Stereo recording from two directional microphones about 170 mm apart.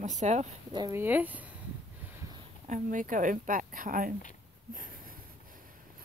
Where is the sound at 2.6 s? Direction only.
50° right (ahead or behind).